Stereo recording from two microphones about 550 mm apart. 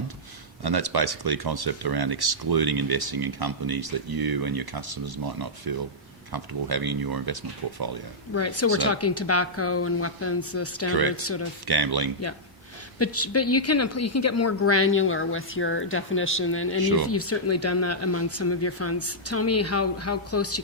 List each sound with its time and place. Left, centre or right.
0.6 s speech: right
8.4 s speech: left
11.6 s speech: right
13.0 s speech: left
16.8 s speech: right
17.1 s speech: left